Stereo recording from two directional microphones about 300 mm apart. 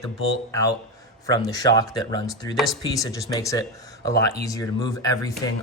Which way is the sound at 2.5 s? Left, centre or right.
Centre.